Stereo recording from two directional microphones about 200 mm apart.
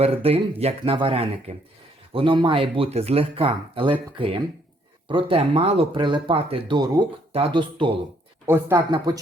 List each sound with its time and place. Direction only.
0.0 s speech: 30° right (ahead or behind)
5.0 s speech: 25° right (ahead or behind)
8.4 s speech: 10° right (ahead or behind)